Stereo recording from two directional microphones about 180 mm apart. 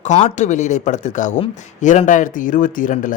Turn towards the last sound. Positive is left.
turn(degrees=50)  # may be behind; listen again after turning